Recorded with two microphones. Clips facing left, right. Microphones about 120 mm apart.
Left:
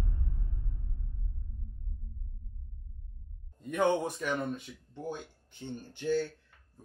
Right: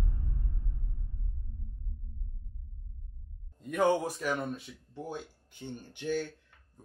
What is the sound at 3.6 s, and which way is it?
Speech, centre (ahead or behind).